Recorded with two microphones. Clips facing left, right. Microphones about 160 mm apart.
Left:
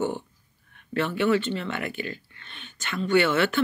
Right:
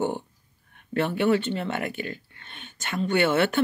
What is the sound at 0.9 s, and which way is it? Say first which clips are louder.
Speech: right 1 dB; 50° right (ahead or behind).